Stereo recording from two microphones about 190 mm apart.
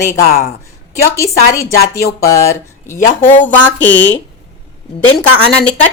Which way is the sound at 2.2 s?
15° left (ahead or behind).